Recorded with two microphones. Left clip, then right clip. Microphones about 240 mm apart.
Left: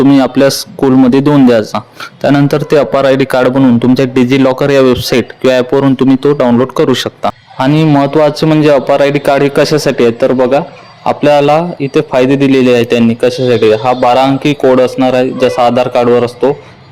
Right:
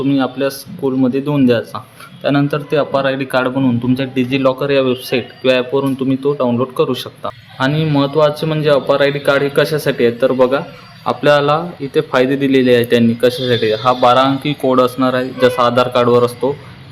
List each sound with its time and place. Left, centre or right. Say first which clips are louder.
0.2 s a man's voice: left 9 dB; left; by 16.5 s centre